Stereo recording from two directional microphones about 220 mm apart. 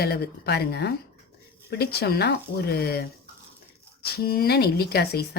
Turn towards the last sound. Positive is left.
turn(degrees=45)  # may be behind; listen again after turning